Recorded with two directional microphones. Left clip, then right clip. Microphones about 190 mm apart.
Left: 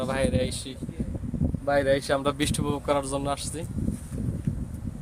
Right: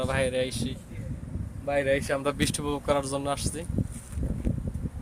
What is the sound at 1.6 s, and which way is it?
Speech, 30° left (ahead or behind).